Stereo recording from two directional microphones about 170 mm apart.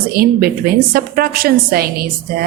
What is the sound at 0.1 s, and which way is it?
A woman's voice, 60° right (ahead or behind).